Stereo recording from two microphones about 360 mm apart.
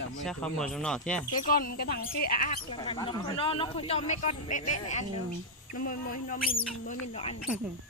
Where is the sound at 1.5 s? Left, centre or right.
Left.